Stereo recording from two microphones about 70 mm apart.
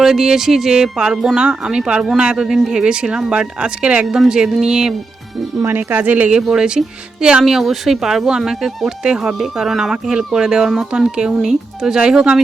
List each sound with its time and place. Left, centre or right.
0.0 s speech: centre
4.0 s speech: centre
5.6 s speech: right
6.4 s speech: centre